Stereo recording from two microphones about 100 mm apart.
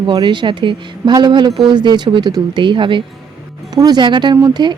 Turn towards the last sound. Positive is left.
turn(degrees=-45)  # may be behind; listen again after turning